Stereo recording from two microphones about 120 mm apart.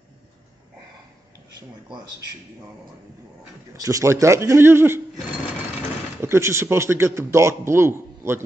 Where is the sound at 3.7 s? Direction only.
30° right (ahead or behind).